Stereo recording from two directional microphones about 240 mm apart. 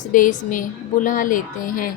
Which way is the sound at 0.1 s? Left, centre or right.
Left.